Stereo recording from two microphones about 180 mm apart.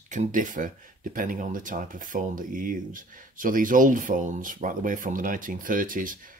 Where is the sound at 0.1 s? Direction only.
45° right (ahead or behind).